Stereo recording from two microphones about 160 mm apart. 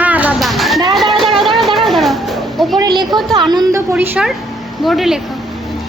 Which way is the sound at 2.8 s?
25° right (ahead or behind).